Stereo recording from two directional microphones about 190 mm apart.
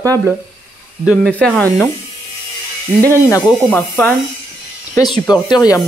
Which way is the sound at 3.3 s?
20° left (ahead or behind).